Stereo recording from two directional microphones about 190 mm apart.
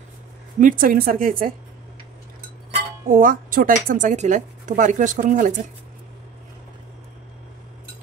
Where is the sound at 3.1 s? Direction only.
45° right (ahead or behind).